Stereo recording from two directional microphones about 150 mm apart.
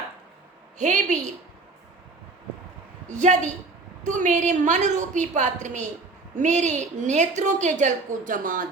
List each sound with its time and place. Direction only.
0.8 s a woman's voice: 55° right (ahead or behind)
3.1 s a woman's voice: 55° right (ahead or behind)